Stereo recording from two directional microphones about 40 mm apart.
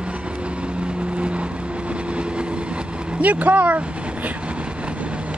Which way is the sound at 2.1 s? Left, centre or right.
Right.